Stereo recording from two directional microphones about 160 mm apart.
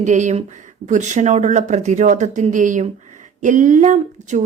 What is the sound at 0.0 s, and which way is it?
A woman's voice, 50° right (ahead or behind).